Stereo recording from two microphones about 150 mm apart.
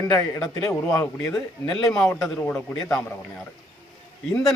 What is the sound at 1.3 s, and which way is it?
A man's voice, centre (ahead or behind).